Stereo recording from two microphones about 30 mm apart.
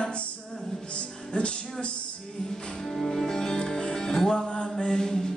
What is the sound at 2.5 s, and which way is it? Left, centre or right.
Music, centre.